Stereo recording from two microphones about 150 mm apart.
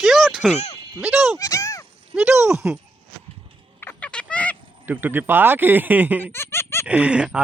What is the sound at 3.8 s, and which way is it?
Frog, 10° left (ahead or behind).